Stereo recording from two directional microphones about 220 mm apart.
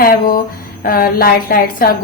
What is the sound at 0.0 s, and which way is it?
A woman's voice, 40° left (ahead or behind).